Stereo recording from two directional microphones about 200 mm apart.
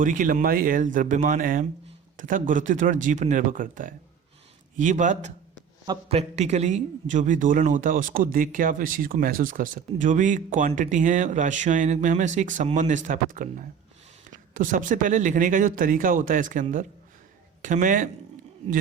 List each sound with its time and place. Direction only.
0.0 s a man's voice: 40° right (ahead or behind)
5.8 s a man's voice: 25° right (ahead or behind); by 18.1 s 40° right (ahead or behind)